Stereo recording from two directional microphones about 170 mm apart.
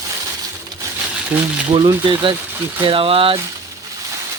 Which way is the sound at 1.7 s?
25° right (ahead or behind).